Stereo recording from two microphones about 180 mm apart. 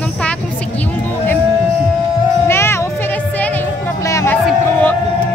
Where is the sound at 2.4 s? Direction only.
15° left (ahead or behind).